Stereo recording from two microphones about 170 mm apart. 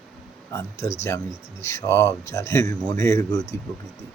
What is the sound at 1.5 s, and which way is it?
Speech, 15° left (ahead or behind).